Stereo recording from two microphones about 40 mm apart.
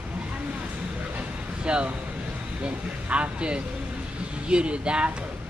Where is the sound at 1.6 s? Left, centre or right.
Right.